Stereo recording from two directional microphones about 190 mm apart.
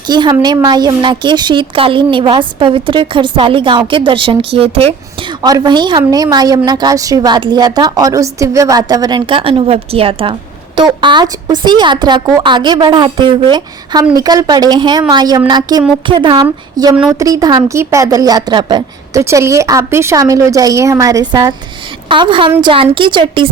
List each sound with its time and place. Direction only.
0.1 s a woman's voice: 20° right (ahead or behind)